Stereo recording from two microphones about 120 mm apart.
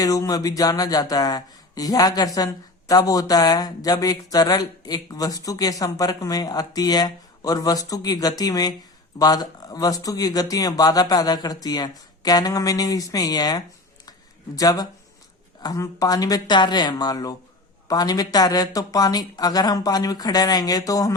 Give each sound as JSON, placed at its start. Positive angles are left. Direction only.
{"t": 0.0, "sound": "speech", "side_deg": 30}